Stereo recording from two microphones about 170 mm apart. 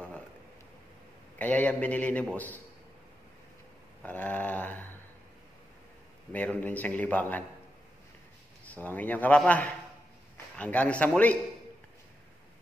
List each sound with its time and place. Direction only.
1.4 s a man's voice: 10° left (ahead or behind)
4.0 s a sound: 10° left (ahead or behind)
6.3 s a man's voice: 10° left (ahead or behind)
8.6 s a man's voice: 10° left (ahead or behind)